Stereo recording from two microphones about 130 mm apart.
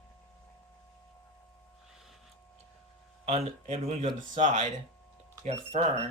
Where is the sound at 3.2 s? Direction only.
55° right (ahead or behind).